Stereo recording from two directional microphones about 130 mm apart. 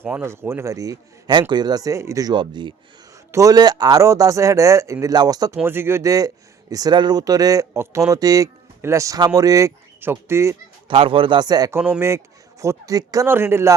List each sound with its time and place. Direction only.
0.0 s speech: 15° right (ahead or behind)
5.5 s speech: 15° right (ahead or behind)
10.8 s speech: 45° right (ahead or behind); by 11.8 s 30° right (ahead or behind)
11.8 s speech: 15° right (ahead or behind)
13.2 s speech: 20° right (ahead or behind)